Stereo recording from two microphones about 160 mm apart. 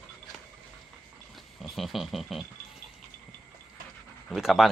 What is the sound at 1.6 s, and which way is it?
Speech, centre (ahead or behind).